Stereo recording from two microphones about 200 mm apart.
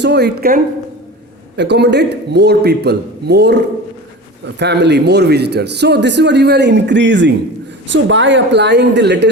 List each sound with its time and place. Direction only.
0.0 s speech: 55° right (ahead or behind)
4.6 s speech: 60° right (ahead or behind)